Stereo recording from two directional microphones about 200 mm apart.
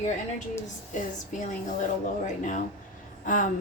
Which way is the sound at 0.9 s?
40° left (ahead or behind).